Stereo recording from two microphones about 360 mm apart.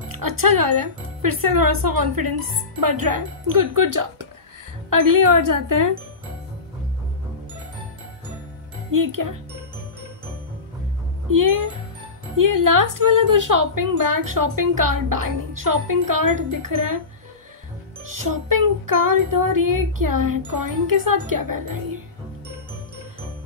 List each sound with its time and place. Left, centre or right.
0.1 s speech: right
8.9 s speech: right
11.2 s speech: right
18.0 s speech: right